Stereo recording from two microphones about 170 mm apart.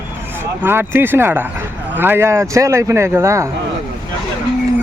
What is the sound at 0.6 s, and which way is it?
Speech, 15° right (ahead or behind).